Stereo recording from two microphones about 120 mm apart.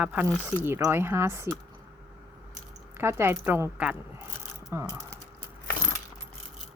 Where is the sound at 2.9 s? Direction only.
20° right (ahead or behind).